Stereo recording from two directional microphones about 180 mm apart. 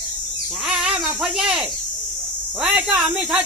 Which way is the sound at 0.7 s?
5° right (ahead or behind).